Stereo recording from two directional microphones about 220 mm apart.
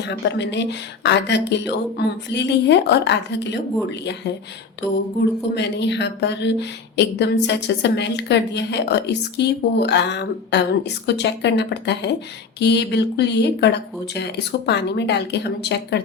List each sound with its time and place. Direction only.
0.1 s a woman's voice: 50° left (ahead or behind)
5.5 s a woman's voice: 50° left (ahead or behind)